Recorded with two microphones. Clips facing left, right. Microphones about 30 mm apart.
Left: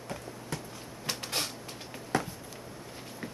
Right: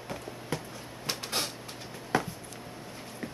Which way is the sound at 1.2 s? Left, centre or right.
Centre.